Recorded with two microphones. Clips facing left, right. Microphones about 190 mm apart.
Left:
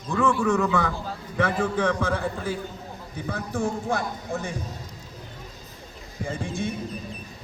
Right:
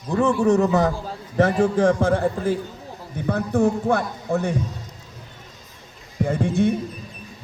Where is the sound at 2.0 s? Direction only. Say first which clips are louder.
Right 7 dB; 45° right (ahead or behind).